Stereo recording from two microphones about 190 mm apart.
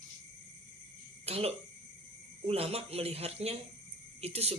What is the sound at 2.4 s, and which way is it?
A man's voice, 30° right (ahead or behind).